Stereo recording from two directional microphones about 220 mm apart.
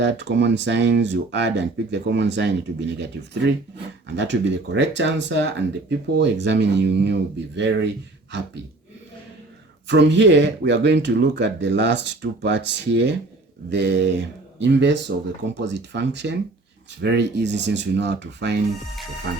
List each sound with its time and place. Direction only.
0.0 s speech: 50° right (ahead or behind)
9.8 s speech: 55° right (ahead or behind)